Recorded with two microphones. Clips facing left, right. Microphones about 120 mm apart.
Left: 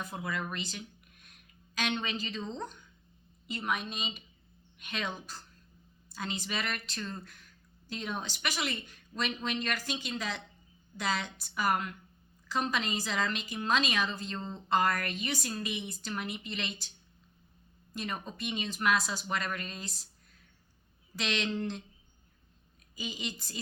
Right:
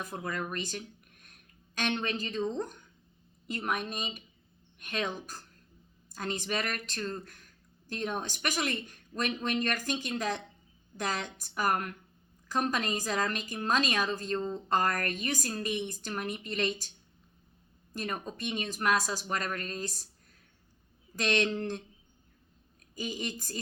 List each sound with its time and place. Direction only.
0.2 s speech: 45° right (ahead or behind)
17.9 s speech: 40° right (ahead or behind)
21.2 s speech: 45° right (ahead or behind)
23.0 s speech: 45° right (ahead or behind)